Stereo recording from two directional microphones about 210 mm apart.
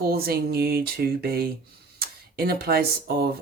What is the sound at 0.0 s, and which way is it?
Speech, 45° right (ahead or behind).